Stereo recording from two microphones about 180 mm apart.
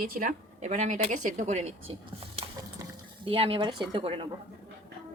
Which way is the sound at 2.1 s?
30° right (ahead or behind).